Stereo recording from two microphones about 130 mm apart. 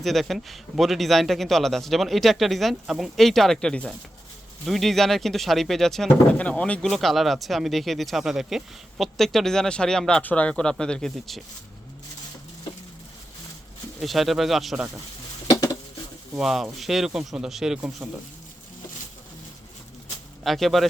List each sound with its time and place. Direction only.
0.0 s speech: centre (ahead or behind)
14.0 s speech: centre (ahead or behind)
15.4 s a sound: 25° left (ahead or behind)
16.4 s speech: centre (ahead or behind)
20.4 s speech: centre (ahead or behind)